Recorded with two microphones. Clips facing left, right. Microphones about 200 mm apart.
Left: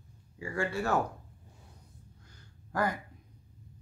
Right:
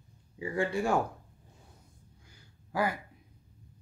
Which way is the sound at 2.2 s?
10° right (ahead or behind).